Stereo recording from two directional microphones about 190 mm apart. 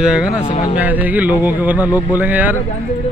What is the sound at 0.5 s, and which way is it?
Speech, 25° left (ahead or behind).